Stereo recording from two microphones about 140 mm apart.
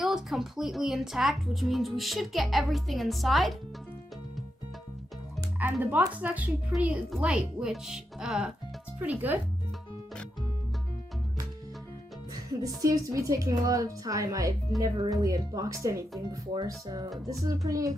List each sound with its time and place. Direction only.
0.0 s speech: centre (ahead or behind)
5.8 s speech: 15° right (ahead or behind)
12.6 s speech: 25° right (ahead or behind)